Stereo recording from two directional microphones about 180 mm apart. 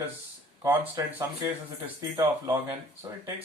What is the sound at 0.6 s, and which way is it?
Speech, 20° right (ahead or behind).